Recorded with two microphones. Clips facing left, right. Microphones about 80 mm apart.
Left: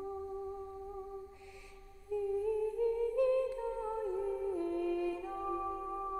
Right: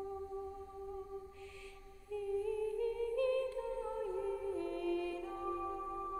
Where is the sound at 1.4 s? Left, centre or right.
Centre.